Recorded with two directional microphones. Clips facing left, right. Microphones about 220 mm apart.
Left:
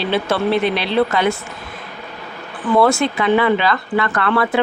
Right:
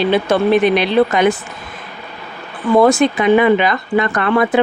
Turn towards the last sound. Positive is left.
turn(degrees=-20)  # may be behind; listen again after turning